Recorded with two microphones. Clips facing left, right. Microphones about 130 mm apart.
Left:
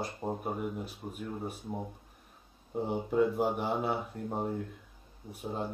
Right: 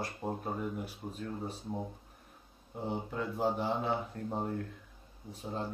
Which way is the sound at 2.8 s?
15° left (ahead or behind).